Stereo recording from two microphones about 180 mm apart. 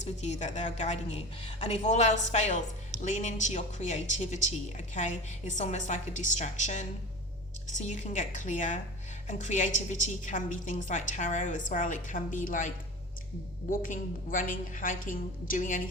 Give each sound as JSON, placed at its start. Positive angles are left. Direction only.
{"t": 0.0, "sound": "a woman's voice", "side_deg": 40}